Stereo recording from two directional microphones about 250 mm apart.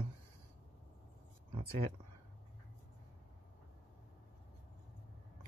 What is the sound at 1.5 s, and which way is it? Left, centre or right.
Speech, right.